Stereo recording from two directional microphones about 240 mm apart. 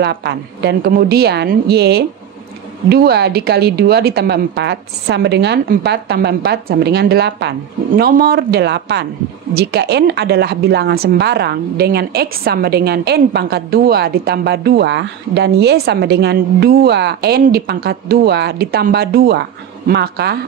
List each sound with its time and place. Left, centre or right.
0.0 s a woman's voice: right